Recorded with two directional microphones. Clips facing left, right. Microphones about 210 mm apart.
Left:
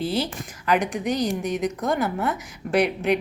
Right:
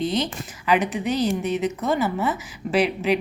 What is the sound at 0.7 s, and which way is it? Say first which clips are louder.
A woman's voice: right 1 dB; 5° right (ahead or behind).